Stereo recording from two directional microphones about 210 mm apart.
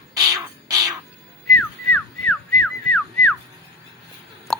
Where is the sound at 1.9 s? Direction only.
5° left (ahead or behind).